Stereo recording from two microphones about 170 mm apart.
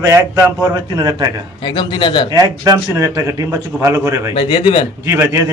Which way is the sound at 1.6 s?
25° left (ahead or behind).